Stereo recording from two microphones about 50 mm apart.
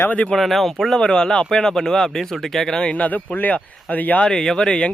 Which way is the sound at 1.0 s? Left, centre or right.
Centre.